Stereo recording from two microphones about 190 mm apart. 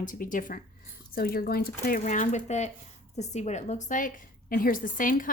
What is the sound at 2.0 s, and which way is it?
A woman's voice, 40° left (ahead or behind).